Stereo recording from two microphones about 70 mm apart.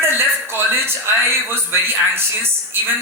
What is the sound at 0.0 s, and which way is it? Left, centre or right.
Music, right.